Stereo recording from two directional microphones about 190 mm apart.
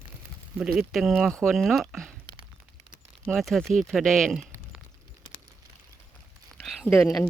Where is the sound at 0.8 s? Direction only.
Centre (ahead or behind).